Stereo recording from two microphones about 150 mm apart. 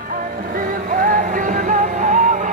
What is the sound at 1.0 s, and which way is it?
Music, 60° right (ahead or behind).